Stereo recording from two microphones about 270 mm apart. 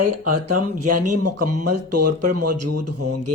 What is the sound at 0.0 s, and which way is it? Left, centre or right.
Speech, right.